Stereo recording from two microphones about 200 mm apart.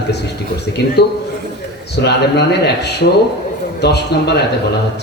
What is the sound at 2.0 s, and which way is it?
A man's voice, 55° left (ahead or behind).